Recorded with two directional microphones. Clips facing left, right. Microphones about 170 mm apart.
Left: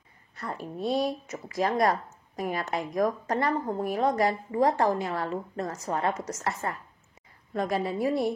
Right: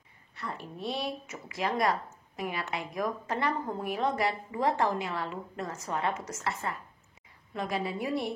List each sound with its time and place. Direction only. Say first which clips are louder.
0.4 s speech: left 5 dB; 40° left (ahead or behind)